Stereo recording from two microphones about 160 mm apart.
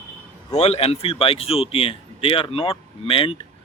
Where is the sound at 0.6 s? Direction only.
40° left (ahead or behind).